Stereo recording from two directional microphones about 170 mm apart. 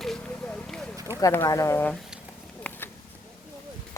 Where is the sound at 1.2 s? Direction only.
20° left (ahead or behind).